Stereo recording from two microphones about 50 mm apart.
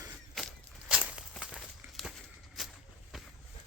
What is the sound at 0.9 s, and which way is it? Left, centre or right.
Walk, right.